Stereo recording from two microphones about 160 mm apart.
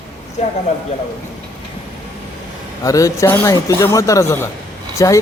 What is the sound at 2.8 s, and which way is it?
Speech, 20° left (ahead or behind).